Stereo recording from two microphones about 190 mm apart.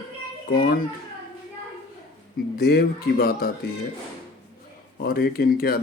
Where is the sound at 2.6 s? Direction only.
55° left (ahead or behind).